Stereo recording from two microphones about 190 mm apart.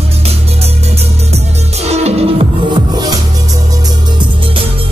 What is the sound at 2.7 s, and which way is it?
Music, 20° right (ahead or behind).